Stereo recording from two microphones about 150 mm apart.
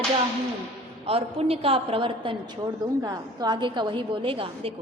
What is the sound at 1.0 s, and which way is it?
A woman's voice, 40° right (ahead or behind).